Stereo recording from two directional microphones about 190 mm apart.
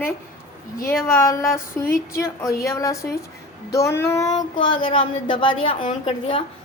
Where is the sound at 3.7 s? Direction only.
15° left (ahead or behind); by 6.4 s 30° left (ahead or behind).